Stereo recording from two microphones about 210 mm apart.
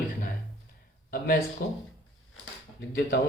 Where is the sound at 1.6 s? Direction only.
45° left (ahead or behind).